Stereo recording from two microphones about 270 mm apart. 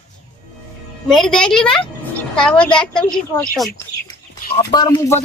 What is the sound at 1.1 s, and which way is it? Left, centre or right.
A woman's voice, centre.